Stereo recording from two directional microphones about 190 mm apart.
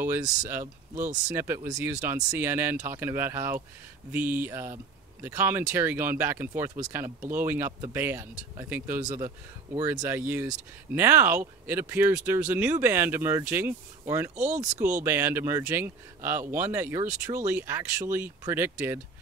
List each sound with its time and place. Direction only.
0.0 s speech: 15° right (ahead or behind)
14.3 s speech: 40° right (ahead or behind)
15.0 s speech: 10° right (ahead or behind)